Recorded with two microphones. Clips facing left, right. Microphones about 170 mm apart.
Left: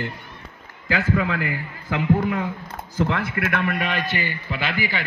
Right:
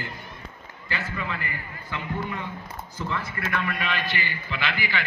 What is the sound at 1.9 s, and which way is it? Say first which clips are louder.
Speech: left 11 dB; 90° left.